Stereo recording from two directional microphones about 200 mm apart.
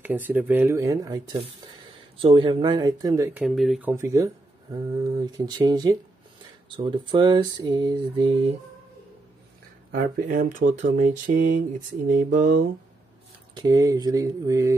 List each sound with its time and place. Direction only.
0.0 s speech: 10° right (ahead or behind)
3.4 s speech: centre (ahead or behind)
3.9 s speech: 15° right (ahead or behind)
9.8 s speech: 45° right (ahead or behind)
13.6 s speech: 20° right (ahead or behind)